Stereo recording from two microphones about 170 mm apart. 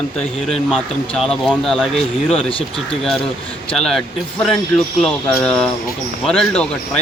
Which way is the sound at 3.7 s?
5° left (ahead or behind).